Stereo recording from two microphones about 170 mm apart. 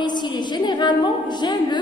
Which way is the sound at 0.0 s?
25° left (ahead or behind).